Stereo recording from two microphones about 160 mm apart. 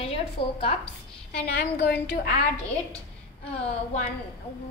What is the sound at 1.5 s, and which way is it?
Speech, 80° left.